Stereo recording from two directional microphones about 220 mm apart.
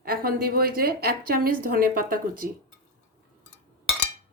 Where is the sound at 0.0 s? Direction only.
40° right (ahead or behind).